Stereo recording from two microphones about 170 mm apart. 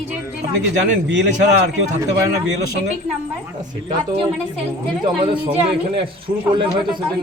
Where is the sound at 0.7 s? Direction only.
90° right.